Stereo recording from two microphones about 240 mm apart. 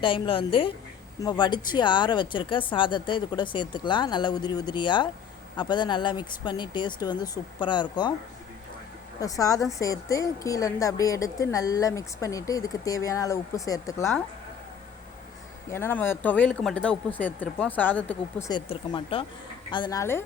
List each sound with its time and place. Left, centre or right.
0.0 s speech: left
9.2 s a woman's voice: centre
15.7 s a woman's voice: centre